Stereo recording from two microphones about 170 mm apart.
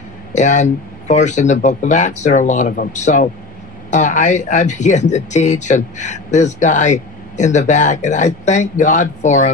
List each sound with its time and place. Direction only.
0.3 s speech: 45° left (ahead or behind)